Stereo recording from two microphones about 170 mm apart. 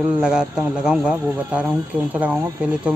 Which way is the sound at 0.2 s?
5° right (ahead or behind).